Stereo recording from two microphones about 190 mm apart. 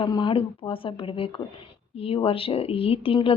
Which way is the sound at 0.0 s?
25° left (ahead or behind).